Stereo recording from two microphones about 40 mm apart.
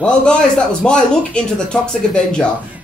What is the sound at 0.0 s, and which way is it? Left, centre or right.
Speech, left.